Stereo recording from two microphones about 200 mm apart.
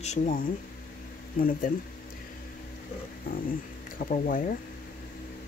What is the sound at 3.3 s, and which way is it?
Speech, 45° left (ahead or behind).